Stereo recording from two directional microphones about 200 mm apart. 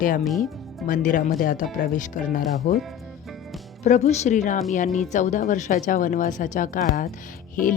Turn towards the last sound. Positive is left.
turn(degrees=40)  # may be behind; listen again after turning